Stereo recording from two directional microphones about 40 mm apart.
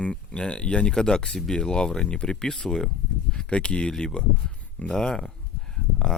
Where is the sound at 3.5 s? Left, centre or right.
Left.